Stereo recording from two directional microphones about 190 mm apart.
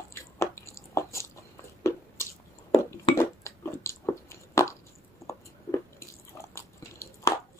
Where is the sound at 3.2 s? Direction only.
15° left (ahead or behind).